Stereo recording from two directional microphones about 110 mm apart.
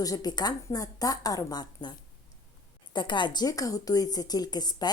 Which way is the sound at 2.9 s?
45° left (ahead or behind).